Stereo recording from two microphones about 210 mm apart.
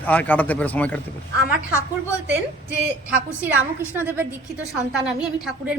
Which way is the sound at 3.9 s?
10° right (ahead or behind).